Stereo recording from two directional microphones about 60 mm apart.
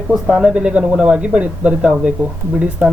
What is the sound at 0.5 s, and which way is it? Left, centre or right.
Speech, centre.